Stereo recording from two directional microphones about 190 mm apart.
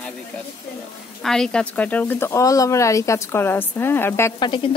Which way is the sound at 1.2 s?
Centre (ahead or behind).